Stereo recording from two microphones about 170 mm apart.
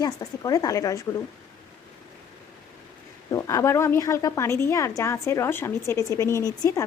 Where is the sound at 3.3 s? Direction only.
20° left (ahead or behind).